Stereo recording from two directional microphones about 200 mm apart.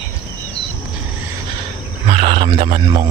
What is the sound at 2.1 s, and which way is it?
Speech, 30° right (ahead or behind).